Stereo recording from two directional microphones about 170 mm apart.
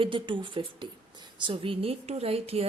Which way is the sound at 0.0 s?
30° right (ahead or behind).